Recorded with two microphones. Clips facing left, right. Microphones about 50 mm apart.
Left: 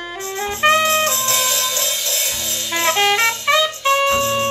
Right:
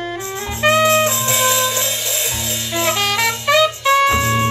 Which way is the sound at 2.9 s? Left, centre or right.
Left.